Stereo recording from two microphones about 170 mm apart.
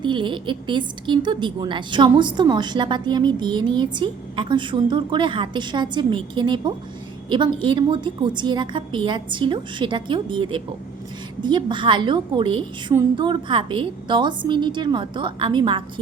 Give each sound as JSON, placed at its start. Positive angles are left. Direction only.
{"t": 0.0, "sound": "a woman's voice", "side_deg": -30}